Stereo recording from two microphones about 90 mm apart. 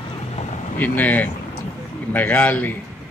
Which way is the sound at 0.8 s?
20° left (ahead or behind).